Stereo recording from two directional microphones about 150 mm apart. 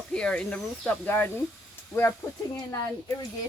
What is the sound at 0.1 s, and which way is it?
Speech, 5° left (ahead or behind).